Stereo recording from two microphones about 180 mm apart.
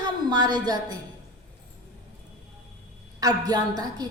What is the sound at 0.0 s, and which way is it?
Speech, 25° right (ahead or behind).